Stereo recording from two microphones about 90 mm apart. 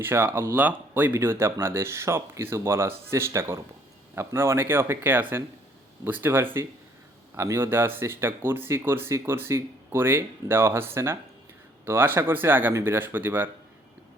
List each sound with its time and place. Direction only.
0.0 s speech: 25° right (ahead or behind)